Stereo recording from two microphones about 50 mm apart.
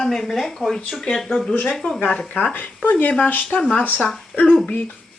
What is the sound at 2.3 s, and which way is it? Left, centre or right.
Speech, left.